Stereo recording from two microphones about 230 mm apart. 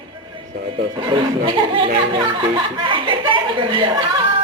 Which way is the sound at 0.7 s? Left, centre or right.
Right.